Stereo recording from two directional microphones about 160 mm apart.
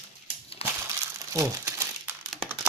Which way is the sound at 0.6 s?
40° left (ahead or behind).